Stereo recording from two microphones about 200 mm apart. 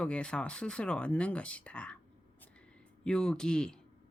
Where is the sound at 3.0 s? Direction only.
5° left (ahead or behind).